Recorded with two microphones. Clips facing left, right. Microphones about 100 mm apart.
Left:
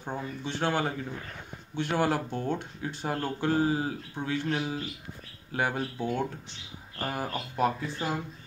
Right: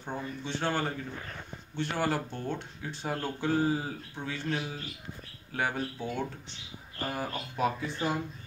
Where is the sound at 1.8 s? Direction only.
5° left (ahead or behind).